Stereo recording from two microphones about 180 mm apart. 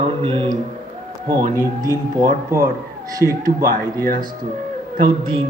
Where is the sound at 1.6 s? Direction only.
20° right (ahead or behind).